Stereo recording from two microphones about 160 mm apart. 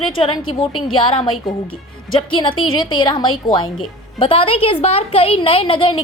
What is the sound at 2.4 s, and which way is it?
A woman's voice, 30° left (ahead or behind).